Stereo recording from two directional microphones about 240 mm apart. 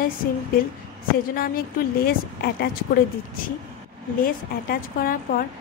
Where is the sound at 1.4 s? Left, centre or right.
Left.